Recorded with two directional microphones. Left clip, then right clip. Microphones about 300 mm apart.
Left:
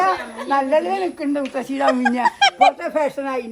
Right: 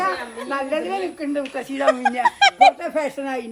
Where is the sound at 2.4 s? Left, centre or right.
Centre.